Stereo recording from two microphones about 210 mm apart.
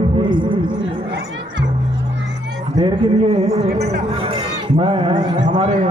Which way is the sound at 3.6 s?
50° right (ahead or behind).